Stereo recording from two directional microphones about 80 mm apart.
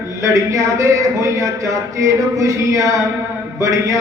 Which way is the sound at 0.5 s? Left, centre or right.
Right.